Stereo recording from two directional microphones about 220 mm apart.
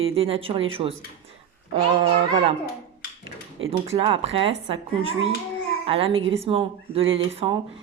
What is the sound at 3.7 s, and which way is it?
A woman's voice, 25° right (ahead or behind).